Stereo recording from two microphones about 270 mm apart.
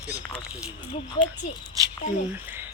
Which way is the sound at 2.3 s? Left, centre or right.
Centre.